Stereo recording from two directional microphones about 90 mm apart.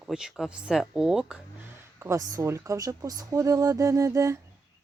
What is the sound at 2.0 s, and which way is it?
Speech, 35° right (ahead or behind).